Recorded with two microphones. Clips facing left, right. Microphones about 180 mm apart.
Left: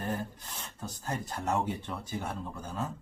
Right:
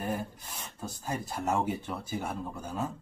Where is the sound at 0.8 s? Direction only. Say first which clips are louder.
Right 1 dB; 10° right (ahead or behind).